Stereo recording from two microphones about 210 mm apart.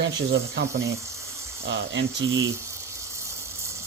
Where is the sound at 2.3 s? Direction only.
15° right (ahead or behind).